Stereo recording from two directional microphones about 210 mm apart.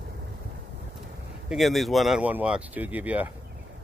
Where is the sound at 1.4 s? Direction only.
Centre (ahead or behind).